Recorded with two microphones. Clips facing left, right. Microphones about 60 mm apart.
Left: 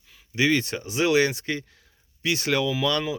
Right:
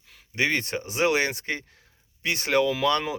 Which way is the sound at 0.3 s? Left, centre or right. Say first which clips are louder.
Left 3 dB; right.